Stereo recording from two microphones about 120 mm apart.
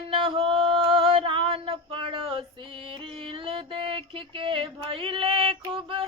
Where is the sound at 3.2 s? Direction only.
45° right (ahead or behind).